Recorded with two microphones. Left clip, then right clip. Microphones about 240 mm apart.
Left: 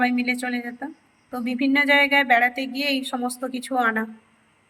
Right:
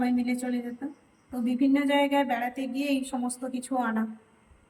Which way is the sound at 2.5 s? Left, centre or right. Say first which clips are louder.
Left 5 dB; centre.